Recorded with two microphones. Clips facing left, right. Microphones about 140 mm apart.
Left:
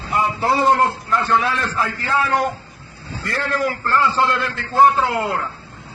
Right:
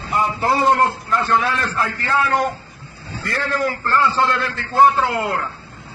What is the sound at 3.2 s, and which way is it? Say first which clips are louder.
A man's voice: even; centre (ahead or behind).